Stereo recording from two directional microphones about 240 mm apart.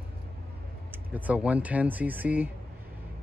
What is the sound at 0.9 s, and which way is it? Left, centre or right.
Speech, centre.